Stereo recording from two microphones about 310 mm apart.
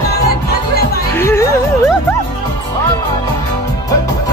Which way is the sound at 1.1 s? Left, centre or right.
Centre.